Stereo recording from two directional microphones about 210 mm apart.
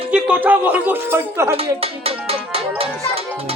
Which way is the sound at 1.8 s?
30° right (ahead or behind).